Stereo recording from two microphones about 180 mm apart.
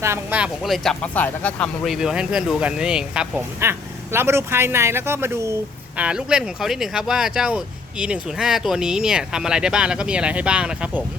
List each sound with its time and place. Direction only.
0.0 s speech: 10° right (ahead or behind)